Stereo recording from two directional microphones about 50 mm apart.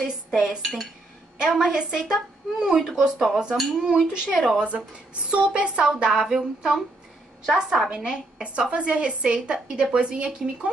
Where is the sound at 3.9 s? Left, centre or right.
Centre.